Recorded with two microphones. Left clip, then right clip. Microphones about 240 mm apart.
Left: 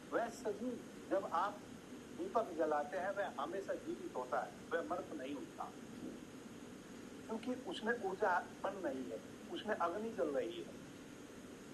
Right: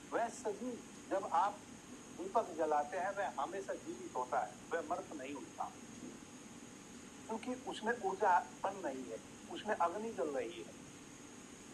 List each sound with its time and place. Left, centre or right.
0.1 s a sound: centre
1.1 s speech: centre
7.4 s speech: centre